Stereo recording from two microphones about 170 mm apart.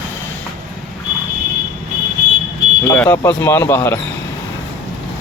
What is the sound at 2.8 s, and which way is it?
Speech, 10° left (ahead or behind).